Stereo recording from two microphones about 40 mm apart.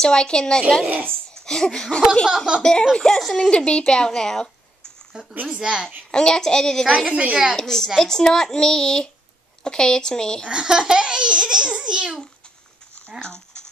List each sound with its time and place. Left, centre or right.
0.0 s a woman's voice: centre
2.2 s speech: centre
2.6 s a woman's voice: centre
2.9 s speech: centre
3.3 s a child's voice: left
5.1 s speech: centre
5.9 s a child's voice: centre
7.1 s a woman's voice: right
7.5 s a child's voice: centre
10.4 s speech: right
13.2 s a sound: left